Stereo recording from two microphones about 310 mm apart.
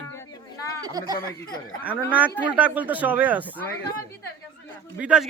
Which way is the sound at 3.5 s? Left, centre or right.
Centre.